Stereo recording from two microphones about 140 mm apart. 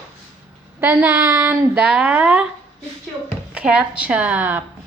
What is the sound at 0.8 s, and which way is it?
A woman's voice, 15° right (ahead or behind).